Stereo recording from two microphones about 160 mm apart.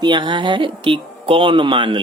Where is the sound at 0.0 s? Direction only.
30° right (ahead or behind).